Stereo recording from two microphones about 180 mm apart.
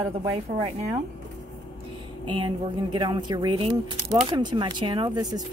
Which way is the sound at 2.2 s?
25° right (ahead or behind).